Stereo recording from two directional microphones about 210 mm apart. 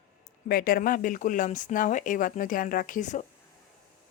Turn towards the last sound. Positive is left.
turn(degrees=35)  # may be behind; listen again after turning